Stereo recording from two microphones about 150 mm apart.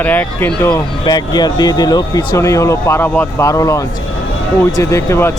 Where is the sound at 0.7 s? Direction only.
25° left (ahead or behind).